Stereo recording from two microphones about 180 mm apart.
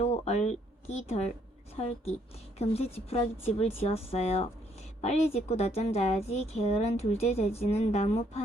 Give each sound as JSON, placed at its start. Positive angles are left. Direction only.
{"t": 0.0, "sound": "a woman's voice", "side_deg": 35}